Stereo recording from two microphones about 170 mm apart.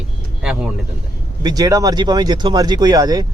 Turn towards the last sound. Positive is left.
turn(degrees=-20)  # may be behind; listen again after turning